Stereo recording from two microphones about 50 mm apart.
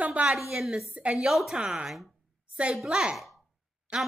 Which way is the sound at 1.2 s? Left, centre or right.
Centre.